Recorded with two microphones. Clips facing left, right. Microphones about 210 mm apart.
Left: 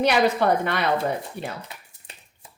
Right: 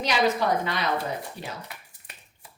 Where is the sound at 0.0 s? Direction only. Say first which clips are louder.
Left 4 dB; 60° left (ahead or behind).